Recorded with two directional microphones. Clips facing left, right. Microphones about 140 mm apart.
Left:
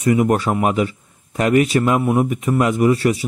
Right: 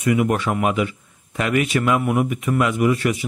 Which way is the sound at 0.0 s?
35° left (ahead or behind).